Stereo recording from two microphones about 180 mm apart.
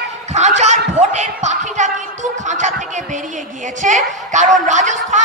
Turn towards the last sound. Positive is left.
turn(degrees=-40)  # may be behind; listen again after turning